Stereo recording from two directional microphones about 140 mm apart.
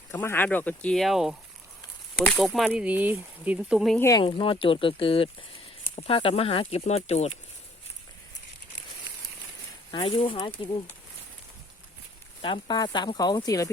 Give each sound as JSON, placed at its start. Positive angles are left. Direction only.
{"t": 0.1, "sound": "speech", "side_deg": 15}
{"t": 2.4, "sound": "speech", "side_deg": 0}
{"t": 4.3, "sound": "speech", "side_deg": 40}
{"t": 9.9, "sound": "speech", "side_deg": 35}
{"t": 12.4, "sound": "speech", "side_deg": 35}